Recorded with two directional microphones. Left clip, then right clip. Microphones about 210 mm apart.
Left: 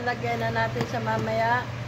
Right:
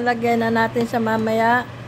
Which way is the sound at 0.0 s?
60° right (ahead or behind).